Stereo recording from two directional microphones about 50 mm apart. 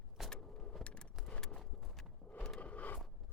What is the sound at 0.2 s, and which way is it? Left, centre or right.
Vehicle, centre.